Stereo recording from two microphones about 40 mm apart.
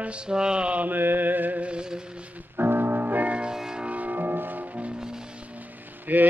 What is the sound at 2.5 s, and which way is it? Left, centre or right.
Music, right.